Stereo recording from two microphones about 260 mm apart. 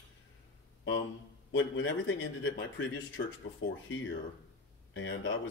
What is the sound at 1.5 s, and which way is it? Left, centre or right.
Speech, left.